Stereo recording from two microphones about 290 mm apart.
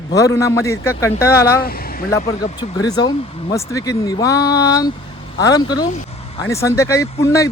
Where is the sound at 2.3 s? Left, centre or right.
Left.